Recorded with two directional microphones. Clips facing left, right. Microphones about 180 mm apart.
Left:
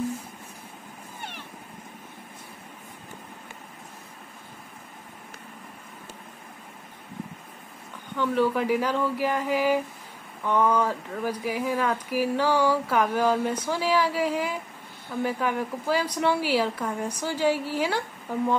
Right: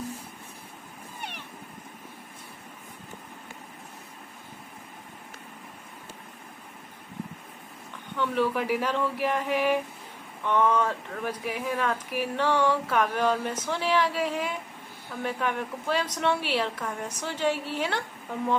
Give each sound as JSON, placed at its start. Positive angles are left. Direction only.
{"t": 8.2, "sound": "speech", "side_deg": 0}